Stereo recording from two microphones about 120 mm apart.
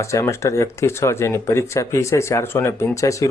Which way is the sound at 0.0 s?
25° left (ahead or behind).